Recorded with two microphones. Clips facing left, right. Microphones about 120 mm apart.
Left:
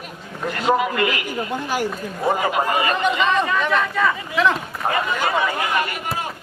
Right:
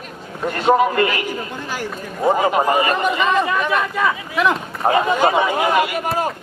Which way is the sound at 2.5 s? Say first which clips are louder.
Right 3 dB; 35° right (ahead or behind).